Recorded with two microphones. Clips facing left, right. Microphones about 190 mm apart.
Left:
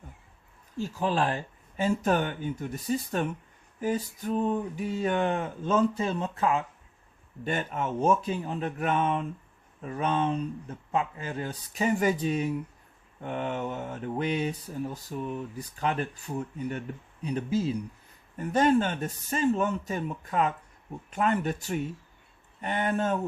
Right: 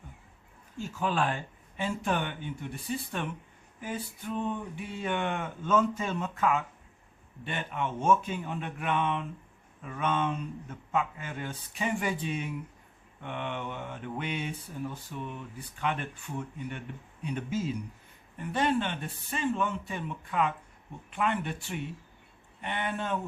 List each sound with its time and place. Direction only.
0.8 s mantra: 35° left (ahead or behind)